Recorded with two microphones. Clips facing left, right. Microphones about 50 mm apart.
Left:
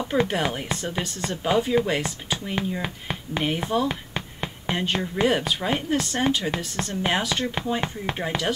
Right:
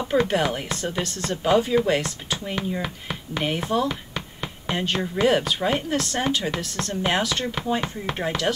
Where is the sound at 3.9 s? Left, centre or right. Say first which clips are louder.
Even; centre.